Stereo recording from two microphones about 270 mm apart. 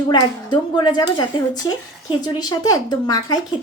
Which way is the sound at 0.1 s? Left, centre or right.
Centre.